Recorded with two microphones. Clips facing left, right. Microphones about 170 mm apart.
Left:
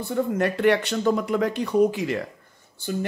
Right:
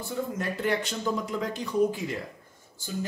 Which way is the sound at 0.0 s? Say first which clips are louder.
Left 8 dB; 65° left (ahead or behind).